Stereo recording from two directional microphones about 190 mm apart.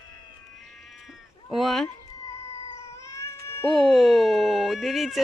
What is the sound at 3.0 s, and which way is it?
Cat, 15° left (ahead or behind).